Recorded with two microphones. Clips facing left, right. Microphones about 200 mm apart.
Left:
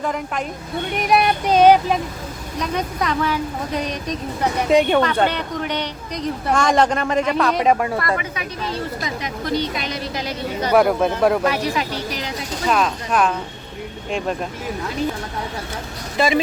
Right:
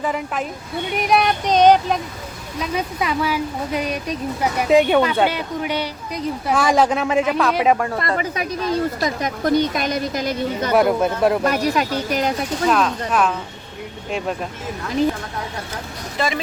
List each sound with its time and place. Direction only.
0.0 s speech: 5° right (ahead or behind)
2.6 s speech: 5° right (ahead or behind)
8.2 s a woman's voice: 45° right (ahead or behind)
10.8 s speech: centre (ahead or behind)
11.4 s a woman's voice: 45° right (ahead or behind)
12.6 s speech: centre (ahead or behind)
16.1 s speech: 15° left (ahead or behind)